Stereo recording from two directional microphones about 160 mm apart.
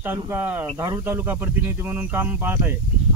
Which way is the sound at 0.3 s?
10° right (ahead or behind).